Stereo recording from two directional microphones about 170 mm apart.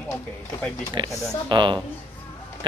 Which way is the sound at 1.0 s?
25° right (ahead or behind).